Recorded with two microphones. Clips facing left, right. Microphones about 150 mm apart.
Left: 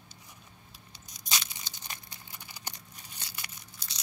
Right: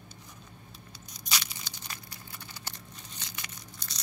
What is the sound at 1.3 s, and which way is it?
Scissors, 20° left (ahead or behind).